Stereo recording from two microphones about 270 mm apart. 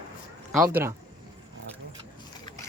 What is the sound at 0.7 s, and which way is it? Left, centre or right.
Speech, centre.